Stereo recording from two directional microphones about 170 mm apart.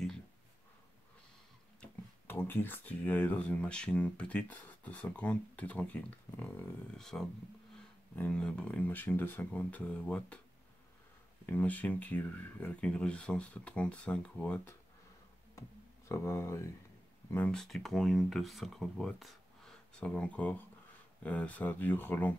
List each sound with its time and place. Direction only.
1.8 s speech: 10° left (ahead or behind)
11.4 s speech: 10° left (ahead or behind)
16.1 s speech: 15° left (ahead or behind)